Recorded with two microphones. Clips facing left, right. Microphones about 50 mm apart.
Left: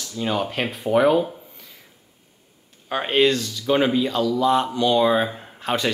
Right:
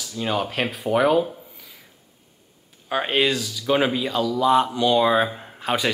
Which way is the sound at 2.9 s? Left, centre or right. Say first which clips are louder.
Left 2 dB; centre.